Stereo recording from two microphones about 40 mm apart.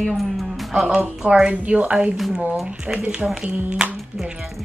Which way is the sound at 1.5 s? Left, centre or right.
Right.